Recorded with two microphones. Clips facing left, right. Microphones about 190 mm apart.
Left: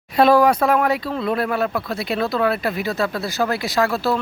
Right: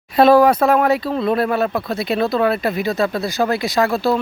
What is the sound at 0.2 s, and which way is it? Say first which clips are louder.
Speech: right 3 dB; 25° right (ahead or behind).